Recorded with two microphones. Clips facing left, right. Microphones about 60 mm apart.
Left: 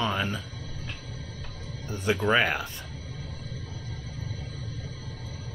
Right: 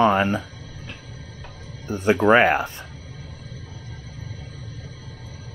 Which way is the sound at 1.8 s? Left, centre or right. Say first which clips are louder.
Right 8 dB; right.